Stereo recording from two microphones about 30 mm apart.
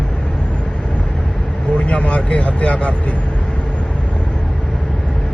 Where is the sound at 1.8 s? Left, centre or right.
Left.